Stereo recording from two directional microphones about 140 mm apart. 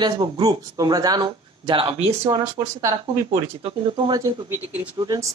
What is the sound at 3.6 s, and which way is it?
Speech, 35° right (ahead or behind).